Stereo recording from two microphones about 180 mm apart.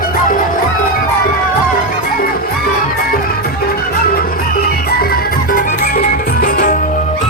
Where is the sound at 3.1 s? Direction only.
55° left (ahead or behind).